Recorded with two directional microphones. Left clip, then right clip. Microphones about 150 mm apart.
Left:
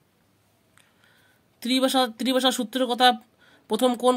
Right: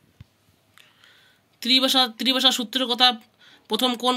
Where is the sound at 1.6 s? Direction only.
55° left (ahead or behind).